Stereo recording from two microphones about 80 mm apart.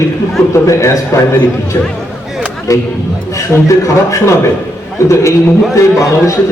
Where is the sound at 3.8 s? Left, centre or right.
Left.